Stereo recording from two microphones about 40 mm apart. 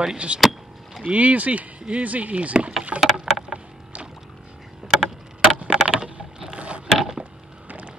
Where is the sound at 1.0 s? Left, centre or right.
Right.